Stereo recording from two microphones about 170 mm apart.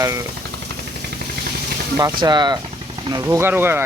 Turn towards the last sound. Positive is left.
turn(degrees=-10)  # may be behind; listen again after turning